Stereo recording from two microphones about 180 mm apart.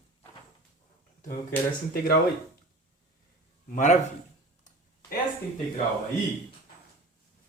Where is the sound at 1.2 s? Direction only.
50° left (ahead or behind).